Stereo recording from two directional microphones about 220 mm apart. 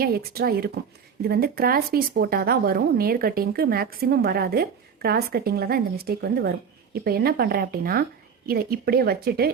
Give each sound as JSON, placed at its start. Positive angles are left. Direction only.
{"t": 0.0, "sound": "a woman's voice", "side_deg": -45}